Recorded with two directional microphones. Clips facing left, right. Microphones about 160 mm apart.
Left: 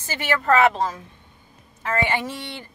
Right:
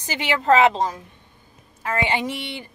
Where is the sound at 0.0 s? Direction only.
15° right (ahead or behind).